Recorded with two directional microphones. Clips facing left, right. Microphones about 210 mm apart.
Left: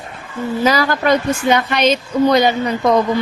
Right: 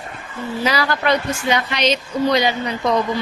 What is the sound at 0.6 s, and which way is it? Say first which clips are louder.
Speech: left 4 dB; 45° left (ahead or behind).